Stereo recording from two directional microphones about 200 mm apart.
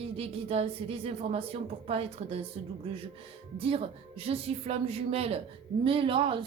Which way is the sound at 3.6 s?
30° right (ahead or behind).